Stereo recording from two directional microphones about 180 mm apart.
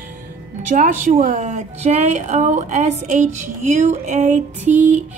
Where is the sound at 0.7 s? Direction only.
45° right (ahead or behind).